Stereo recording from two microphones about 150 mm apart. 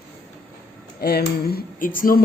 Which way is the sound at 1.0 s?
90° left.